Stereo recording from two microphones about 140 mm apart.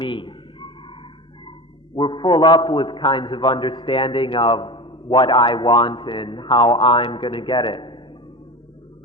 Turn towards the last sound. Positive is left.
turn(degrees=35)  # may be behind; listen again after turning